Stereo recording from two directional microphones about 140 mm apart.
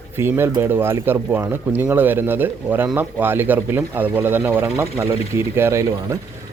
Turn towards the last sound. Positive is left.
turn(degrees=-20)  # may be behind; listen again after turning